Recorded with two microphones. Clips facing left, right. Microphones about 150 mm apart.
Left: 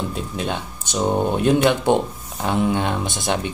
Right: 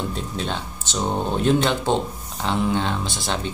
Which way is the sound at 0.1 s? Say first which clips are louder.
Left 2 dB; 10° left (ahead or behind).